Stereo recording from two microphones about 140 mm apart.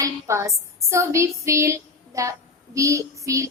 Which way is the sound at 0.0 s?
20° right (ahead or behind).